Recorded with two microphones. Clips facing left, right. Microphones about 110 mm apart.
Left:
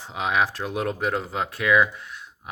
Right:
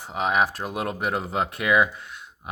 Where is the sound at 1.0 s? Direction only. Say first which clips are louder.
Right 1 dB; 20° right (ahead or behind).